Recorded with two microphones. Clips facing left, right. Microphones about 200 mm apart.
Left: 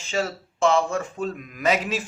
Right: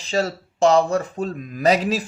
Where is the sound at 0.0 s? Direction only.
35° right (ahead or behind).